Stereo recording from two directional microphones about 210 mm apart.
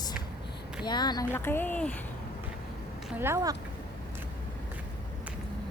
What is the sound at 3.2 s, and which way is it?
Speech, 10° right (ahead or behind).